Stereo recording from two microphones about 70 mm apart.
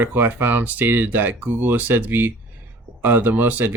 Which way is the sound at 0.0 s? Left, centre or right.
Right.